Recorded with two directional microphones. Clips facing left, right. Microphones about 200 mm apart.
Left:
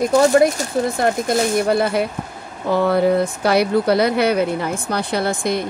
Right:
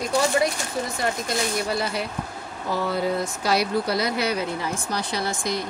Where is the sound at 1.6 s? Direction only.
55° left (ahead or behind).